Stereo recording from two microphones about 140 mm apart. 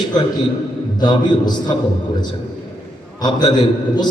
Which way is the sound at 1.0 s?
30° left (ahead or behind).